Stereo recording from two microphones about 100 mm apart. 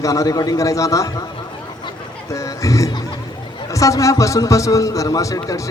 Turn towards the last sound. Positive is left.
turn(degrees=35)  # may be behind; listen again after turning